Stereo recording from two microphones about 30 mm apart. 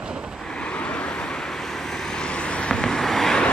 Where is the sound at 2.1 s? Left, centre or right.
Left.